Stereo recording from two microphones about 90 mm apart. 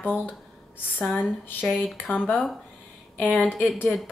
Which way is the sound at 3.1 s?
15° left (ahead or behind).